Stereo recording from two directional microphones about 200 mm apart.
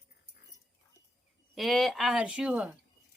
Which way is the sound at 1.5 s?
Centre (ahead or behind).